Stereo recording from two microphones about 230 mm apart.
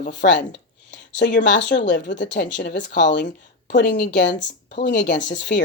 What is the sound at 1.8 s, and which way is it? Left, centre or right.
Speech, left.